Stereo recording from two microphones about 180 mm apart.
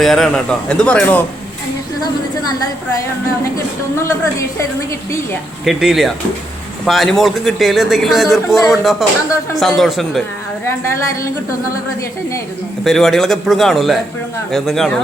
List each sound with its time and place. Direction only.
0.0 s speech: centre (ahead or behind)
2.0 s a woman's voice: 20° left (ahead or behind)
3.9 s a woman's voice: 15° left (ahead or behind)
5.6 s speech: centre (ahead or behind)
12.8 s speech: centre (ahead or behind)